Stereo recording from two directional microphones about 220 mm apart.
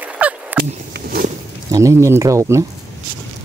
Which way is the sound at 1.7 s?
15° right (ahead or behind).